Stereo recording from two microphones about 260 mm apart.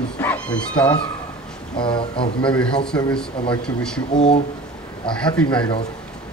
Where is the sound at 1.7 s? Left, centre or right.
Centre.